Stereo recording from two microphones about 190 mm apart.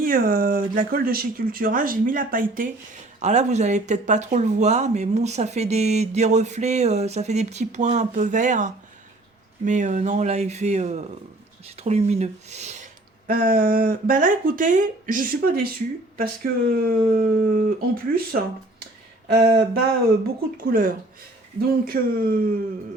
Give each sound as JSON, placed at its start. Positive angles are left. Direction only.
{"t": 0.0, "sound": "speech", "side_deg": -50}